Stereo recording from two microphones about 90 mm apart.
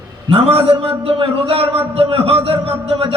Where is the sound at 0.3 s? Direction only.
90° right.